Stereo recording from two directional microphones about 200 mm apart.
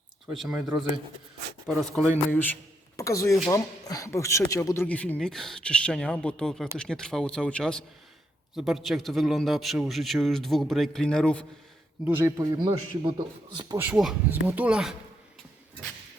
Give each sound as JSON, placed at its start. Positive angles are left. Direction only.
{"t": 0.4, "sound": "speech", "side_deg": -10}
{"t": 1.6, "sound": "a man's voice", "side_deg": 0}
{"t": 12.0, "sound": "speech", "side_deg": -10}
{"t": 13.7, "sound": "speech", "side_deg": -5}